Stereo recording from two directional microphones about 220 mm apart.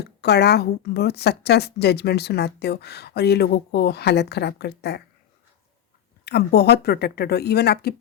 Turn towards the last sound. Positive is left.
turn(degrees=45)  # may be behind; listen again after turning